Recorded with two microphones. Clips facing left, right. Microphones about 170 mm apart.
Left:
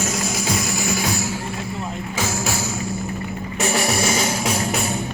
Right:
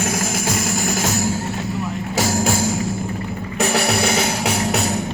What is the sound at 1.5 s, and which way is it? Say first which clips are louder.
Music: right 4 dB; 75° right (ahead or behind).